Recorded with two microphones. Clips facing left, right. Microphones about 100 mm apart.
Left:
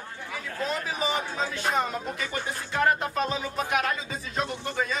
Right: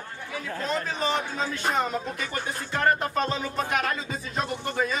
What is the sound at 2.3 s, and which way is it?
Music, 5° left (ahead or behind).